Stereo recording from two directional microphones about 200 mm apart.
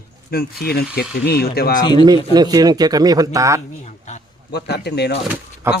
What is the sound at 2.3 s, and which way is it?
Speech, 20° right (ahead or behind).